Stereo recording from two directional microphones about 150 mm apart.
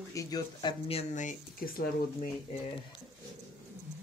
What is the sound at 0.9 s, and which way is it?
Speech, 50° left (ahead or behind).